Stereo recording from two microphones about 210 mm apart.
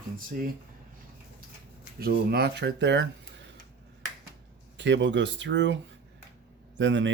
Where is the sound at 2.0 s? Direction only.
50° right (ahead or behind).